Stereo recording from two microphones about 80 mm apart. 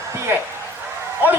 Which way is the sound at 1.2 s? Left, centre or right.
Right.